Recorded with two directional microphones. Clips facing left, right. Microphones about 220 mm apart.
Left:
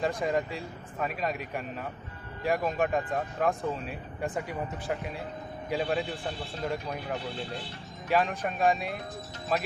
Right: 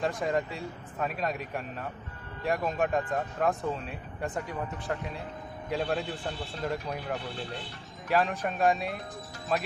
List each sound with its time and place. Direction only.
0.0 s speech: centre (ahead or behind)